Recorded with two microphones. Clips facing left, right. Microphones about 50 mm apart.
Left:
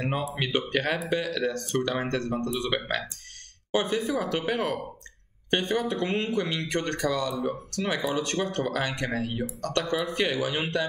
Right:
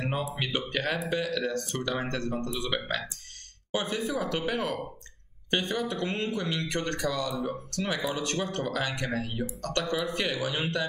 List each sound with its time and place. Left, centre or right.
0.0 s speech: centre
9.3 s speech: centre
9.6 s speech: centre